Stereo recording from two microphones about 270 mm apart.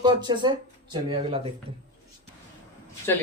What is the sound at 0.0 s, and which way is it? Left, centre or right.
Speech, centre.